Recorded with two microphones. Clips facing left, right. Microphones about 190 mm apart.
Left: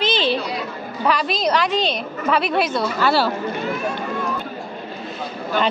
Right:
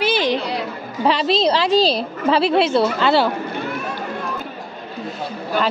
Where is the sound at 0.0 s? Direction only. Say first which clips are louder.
Right 2 dB; 10° right (ahead or behind).